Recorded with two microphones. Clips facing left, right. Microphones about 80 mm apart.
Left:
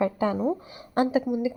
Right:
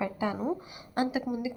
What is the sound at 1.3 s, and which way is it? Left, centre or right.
Speech, centre.